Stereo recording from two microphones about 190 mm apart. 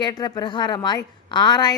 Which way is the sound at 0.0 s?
20° left (ahead or behind).